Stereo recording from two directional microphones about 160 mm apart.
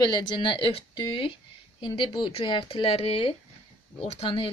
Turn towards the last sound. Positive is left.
turn(degrees=35)  # may be behind; listen again after turning